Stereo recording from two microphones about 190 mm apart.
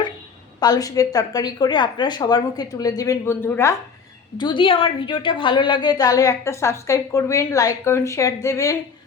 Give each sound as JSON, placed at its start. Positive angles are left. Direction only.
{"t": 0.6, "sound": "a woman's voice", "side_deg": 20}
{"t": 4.4, "sound": "a woman's voice", "side_deg": 25}